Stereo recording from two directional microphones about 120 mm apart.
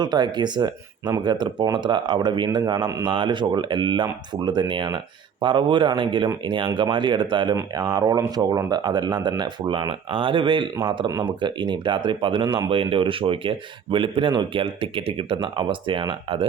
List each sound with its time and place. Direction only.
0.0 s speech: 35° right (ahead or behind)